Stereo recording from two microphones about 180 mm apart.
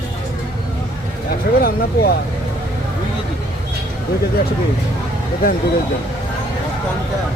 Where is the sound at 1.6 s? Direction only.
60° left (ahead or behind).